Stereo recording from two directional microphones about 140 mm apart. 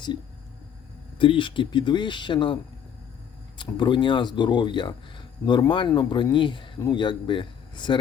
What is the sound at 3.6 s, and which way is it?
Speech, 35° left (ahead or behind).